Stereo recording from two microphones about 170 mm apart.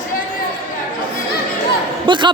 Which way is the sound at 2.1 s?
30° right (ahead or behind).